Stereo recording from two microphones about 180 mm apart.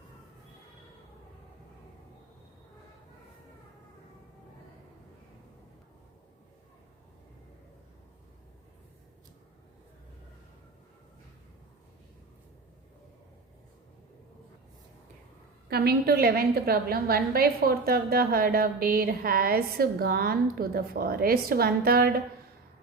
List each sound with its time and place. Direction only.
15.7 s a woman's voice: 60° right (ahead or behind)